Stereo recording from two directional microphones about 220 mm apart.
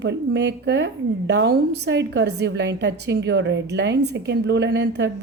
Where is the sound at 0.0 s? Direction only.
50° right (ahead or behind).